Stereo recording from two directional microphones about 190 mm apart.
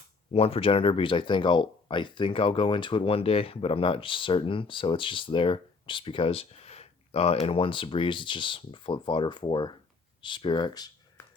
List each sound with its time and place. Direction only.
0.3 s speech: 30° left (ahead or behind)